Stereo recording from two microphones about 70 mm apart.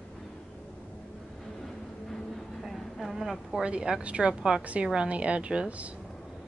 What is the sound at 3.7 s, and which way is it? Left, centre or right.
A woman's voice, centre.